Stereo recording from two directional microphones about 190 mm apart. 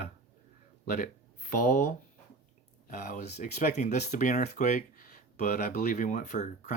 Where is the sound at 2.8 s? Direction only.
45° left (ahead or behind).